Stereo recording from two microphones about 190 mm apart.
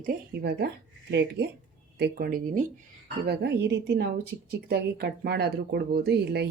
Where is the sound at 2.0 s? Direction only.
50° right (ahead or behind).